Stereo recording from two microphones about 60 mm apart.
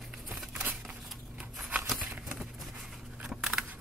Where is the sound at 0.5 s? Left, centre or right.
Right.